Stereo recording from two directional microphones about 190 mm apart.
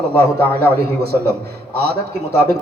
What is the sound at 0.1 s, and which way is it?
Speech, 10° left (ahead or behind).